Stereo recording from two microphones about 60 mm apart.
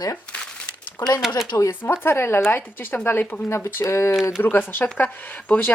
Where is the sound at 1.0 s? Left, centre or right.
Left.